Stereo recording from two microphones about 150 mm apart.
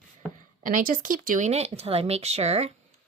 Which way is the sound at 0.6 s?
65° right (ahead or behind).